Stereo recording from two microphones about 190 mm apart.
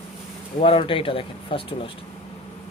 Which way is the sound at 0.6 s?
30° left (ahead or behind).